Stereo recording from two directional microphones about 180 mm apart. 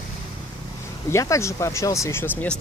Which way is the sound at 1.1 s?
15° left (ahead or behind).